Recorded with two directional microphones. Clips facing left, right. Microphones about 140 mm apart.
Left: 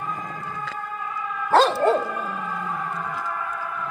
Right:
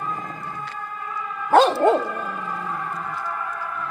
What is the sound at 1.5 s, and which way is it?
Dog, 20° right (ahead or behind).